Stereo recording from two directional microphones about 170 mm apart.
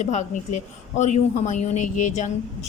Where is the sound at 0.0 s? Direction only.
40° left (ahead or behind).